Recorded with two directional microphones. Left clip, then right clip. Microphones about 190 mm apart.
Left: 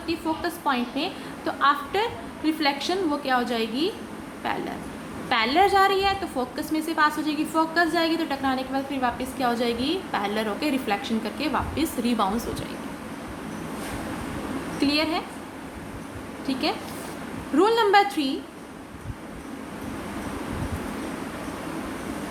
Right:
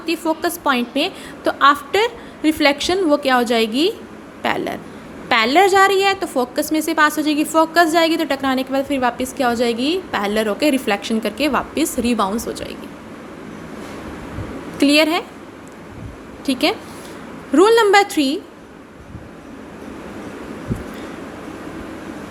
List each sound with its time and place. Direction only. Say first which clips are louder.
0.0 s a woman's voice: right 7 dB; 45° right (ahead or behind)
14.8 s a woman's voice: right 10 dB; 45° right (ahead or behind)
16.5 s a woman's voice: right 8 dB; 45° right (ahead or behind)